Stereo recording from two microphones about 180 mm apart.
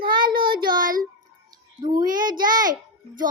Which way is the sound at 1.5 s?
25° right (ahead or behind).